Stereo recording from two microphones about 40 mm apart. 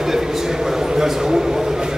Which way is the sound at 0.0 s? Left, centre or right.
Centre.